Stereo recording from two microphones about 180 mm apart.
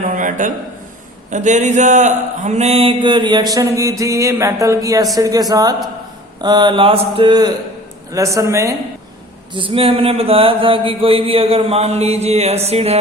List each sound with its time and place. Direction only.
0.0 s a sound: 45° right (ahead or behind)
1.3 s mantra: 45° right (ahead or behind); by 7.5 s 25° right (ahead or behind)
8.1 s speech: 15° right (ahead or behind)
9.5 s mantra: 30° right (ahead or behind)